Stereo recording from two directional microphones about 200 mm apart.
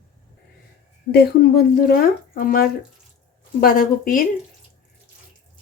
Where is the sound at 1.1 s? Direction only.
50° left (ahead or behind).